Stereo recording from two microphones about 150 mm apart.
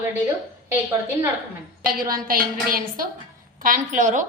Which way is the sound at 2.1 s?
75° right (ahead or behind).